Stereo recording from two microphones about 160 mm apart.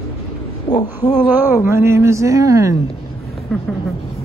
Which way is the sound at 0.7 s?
25° left (ahead or behind).